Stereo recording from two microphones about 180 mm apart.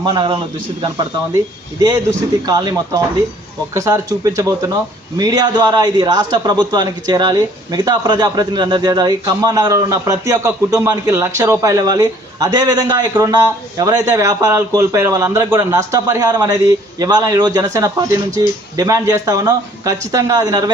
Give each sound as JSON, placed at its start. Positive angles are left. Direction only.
{"t": 0.0, "sound": "a man's voice", "side_deg": -25}
{"t": 2.5, "sound": "a man's voice", "side_deg": -20}